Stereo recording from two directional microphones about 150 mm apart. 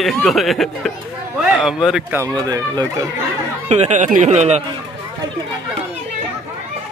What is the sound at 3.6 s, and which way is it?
Speech, 50° right (ahead or behind).